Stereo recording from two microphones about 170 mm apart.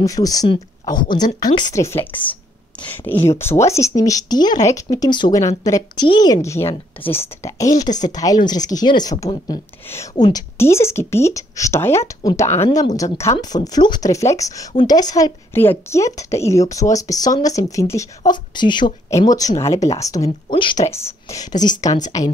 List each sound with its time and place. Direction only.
0.0 s a woman's voice: 20° left (ahead or behind)
20.8 s speech: 15° left (ahead or behind)